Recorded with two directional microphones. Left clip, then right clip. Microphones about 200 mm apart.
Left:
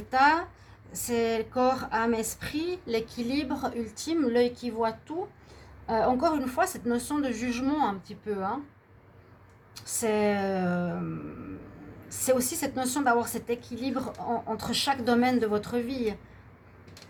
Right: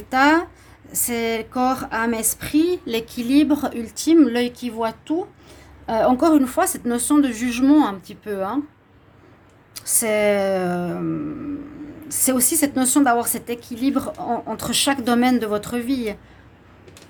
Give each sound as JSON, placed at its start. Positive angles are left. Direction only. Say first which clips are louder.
{"t": 0.1, "sound": "speech", "louder": "right 6 dB", "side_deg": -55}
{"t": 9.7, "sound": "speech", "louder": "right 7 dB", "side_deg": -55}
{"t": 12.2, "sound": "speech", "louder": "right 6 dB", "side_deg": -55}